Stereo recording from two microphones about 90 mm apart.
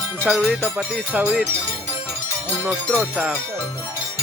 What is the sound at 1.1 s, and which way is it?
Speech, 15° right (ahead or behind).